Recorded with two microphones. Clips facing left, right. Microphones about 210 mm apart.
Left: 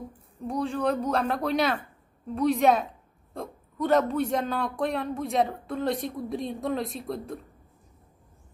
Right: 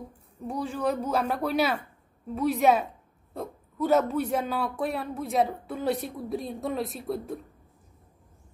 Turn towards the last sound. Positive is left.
turn(degrees=-5)  # may be behind; listen again after turning